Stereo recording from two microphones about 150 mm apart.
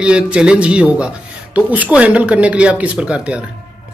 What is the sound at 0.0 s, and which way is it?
Speech, 5° right (ahead or behind).